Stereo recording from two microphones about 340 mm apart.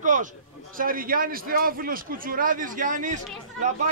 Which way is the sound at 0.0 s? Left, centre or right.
Right.